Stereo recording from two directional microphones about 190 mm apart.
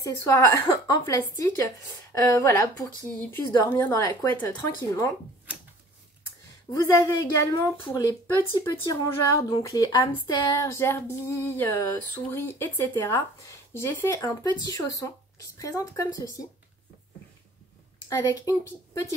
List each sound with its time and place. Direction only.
0.0 s speech: 15° left (ahead or behind)
6.7 s speech: 20° left (ahead or behind)
18.1 s speech: 15° left (ahead or behind)